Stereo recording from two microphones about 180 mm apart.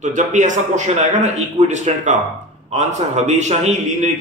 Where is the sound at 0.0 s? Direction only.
45° right (ahead or behind).